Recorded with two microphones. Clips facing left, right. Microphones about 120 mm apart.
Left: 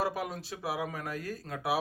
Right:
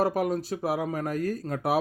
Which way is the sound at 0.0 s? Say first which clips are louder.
Right 8 dB; 45° right (ahead or behind).